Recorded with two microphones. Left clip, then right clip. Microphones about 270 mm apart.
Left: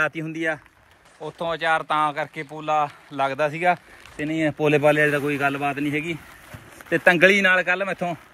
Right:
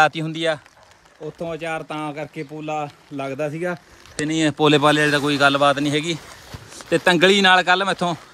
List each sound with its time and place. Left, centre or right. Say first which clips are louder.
0.0 s speech: right 6 dB; centre
1.4 s speech: left 5 dB; centre
4.6 s speech: right 2 dB; centre
5.8 s speech: right 4 dB; right
6.9 s speech: right 1 dB; centre